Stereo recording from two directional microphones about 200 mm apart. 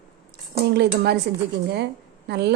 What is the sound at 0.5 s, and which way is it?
Speech, 55° right (ahead or behind).